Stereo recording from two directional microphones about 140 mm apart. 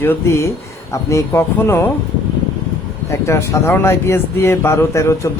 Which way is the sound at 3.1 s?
20° left (ahead or behind).